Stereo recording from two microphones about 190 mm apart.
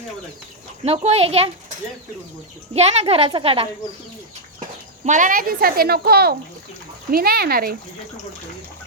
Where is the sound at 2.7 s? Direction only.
35° right (ahead or behind).